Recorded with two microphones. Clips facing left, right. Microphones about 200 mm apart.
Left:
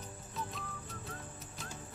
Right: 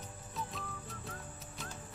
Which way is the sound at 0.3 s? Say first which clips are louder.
Even; centre (ahead or behind).